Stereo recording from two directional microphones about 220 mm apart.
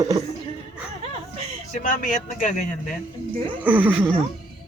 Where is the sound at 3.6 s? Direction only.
10° right (ahead or behind).